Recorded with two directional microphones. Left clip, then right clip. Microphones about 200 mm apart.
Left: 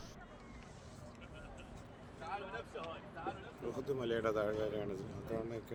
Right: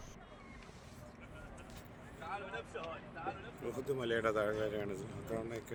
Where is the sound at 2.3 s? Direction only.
45° right (ahead or behind).